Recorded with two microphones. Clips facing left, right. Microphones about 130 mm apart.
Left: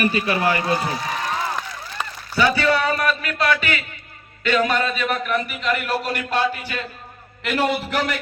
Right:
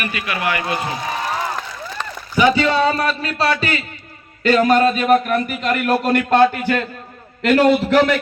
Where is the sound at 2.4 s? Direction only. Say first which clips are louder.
Right 4 dB; 20° right (ahead or behind); by 6.8 s 55° right (ahead or behind).